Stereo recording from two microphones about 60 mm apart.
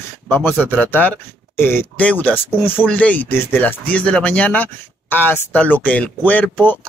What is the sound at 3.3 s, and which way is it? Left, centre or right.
Speech, left.